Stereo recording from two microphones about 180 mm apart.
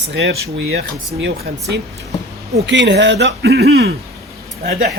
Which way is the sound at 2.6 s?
75° right (ahead or behind).